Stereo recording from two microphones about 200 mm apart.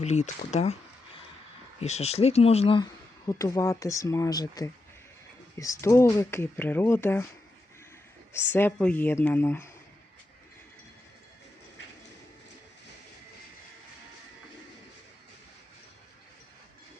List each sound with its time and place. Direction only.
0.0 s speech: 35° left (ahead or behind)
1.8 s speech: 30° left (ahead or behind)
3.2 s speech: 15° left (ahead or behind)
8.3 s speech: 10° left (ahead or behind)